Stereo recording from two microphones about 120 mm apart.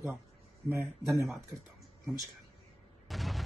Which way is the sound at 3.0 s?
Centre (ahead or behind).